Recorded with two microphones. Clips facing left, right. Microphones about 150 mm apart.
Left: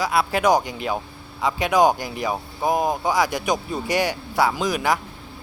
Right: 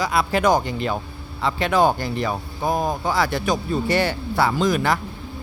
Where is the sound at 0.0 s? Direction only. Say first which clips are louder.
Even; 5° left (ahead or behind).